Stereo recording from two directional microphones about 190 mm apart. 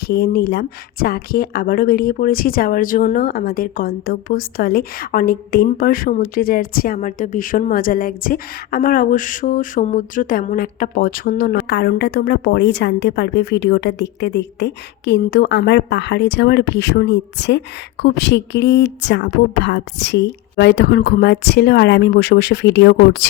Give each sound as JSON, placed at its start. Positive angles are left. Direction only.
{"t": 0.0, "sound": "speech", "side_deg": 55}